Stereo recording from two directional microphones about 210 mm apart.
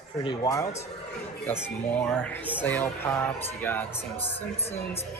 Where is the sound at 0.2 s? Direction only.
20° left (ahead or behind).